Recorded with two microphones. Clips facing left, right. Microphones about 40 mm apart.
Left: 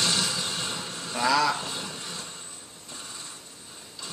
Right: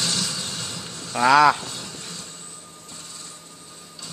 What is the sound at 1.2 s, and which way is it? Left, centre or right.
Speech, right.